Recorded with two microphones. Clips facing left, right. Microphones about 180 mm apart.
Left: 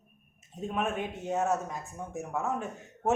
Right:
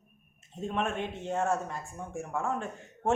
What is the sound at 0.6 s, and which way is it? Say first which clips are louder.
A man's voice: even; 5° left (ahead or behind).